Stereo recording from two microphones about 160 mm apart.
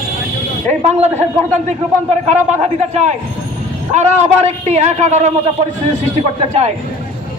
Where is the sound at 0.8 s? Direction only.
40° right (ahead or behind).